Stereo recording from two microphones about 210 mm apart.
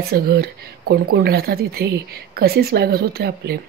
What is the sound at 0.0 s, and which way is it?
Speech, 50° right (ahead or behind).